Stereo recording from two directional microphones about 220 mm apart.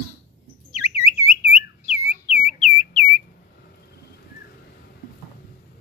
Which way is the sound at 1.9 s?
30° left (ahead or behind).